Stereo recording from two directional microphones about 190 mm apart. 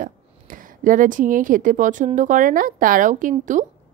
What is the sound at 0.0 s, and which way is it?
A woman's voice, 45° right (ahead or behind).